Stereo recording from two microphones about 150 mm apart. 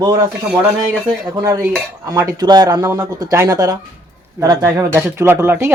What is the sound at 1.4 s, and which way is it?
Speech, 25° right (ahead or behind).